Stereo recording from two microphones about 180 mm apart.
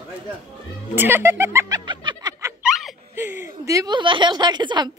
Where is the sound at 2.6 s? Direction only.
Centre (ahead or behind).